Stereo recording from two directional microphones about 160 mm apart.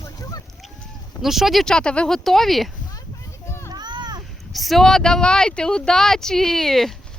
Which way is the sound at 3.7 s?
25° right (ahead or behind).